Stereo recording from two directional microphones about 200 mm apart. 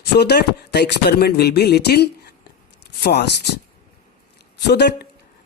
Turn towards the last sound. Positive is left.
turn(degrees=55)  # may be behind; listen again after turning